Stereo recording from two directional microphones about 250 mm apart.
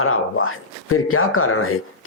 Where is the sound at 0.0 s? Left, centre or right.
Left.